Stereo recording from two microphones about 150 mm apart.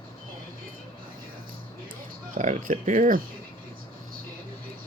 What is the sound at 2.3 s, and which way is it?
Speech, 60° right (ahead or behind).